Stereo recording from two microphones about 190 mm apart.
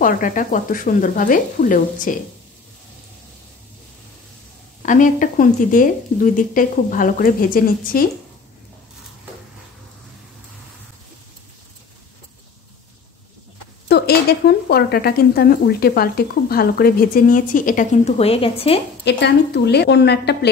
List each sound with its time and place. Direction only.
0.0 s speech: 45° left (ahead or behind)
4.8 s speech: 45° left (ahead or behind)
13.8 s speech: 55° left (ahead or behind); by 18.8 s 30° left (ahead or behind)
19.0 s a woman's voice: 65° left (ahead or behind)